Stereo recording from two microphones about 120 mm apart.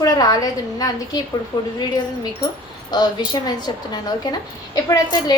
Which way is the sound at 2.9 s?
35° left (ahead or behind).